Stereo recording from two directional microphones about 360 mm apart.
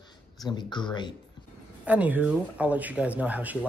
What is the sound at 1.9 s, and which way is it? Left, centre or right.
A man's voice, centre.